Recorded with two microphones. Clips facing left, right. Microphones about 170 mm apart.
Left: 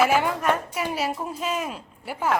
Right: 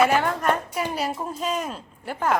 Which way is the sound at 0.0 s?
5° left (ahead or behind).